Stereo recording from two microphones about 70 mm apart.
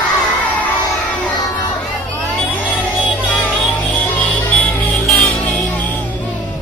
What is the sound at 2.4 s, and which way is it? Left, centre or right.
Music, left.